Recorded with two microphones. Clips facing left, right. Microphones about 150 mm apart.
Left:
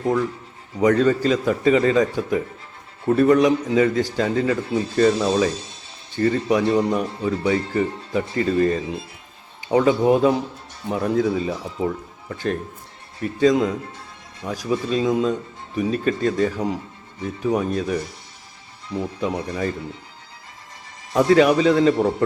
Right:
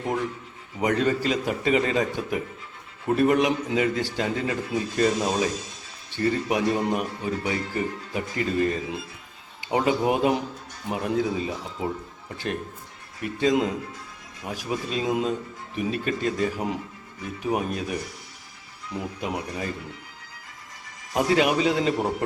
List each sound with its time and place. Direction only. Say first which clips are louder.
0.8 s speech: left 6 dB; 40° left (ahead or behind)
11.9 s speech: left 4 dB; 55° left (ahead or behind)
13.1 s speech: left 5 dB; 35° left (ahead or behind)
21.3 s speech: left 6 dB; 40° left (ahead or behind)